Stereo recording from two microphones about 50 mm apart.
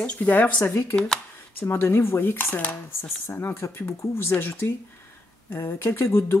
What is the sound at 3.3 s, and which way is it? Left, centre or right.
Speech, left.